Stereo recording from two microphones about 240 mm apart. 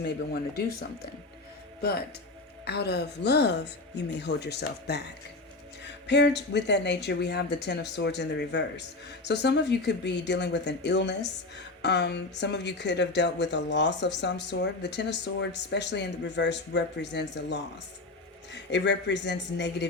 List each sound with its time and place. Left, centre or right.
1.8 s speech: left
18.5 s speech: left